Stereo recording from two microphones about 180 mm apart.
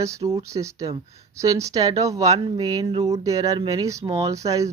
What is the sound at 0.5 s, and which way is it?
Speech, 15° right (ahead or behind).